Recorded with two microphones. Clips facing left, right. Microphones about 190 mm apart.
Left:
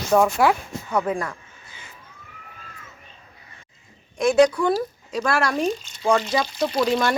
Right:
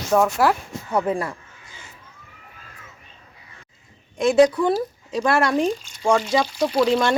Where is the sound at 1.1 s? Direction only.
30° right (ahead or behind).